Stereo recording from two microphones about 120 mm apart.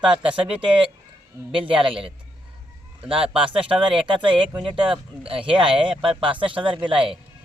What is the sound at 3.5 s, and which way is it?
Speech, 45° right (ahead or behind).